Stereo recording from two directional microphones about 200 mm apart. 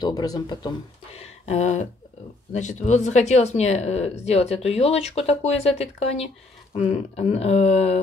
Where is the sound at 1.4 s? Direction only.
35° left (ahead or behind).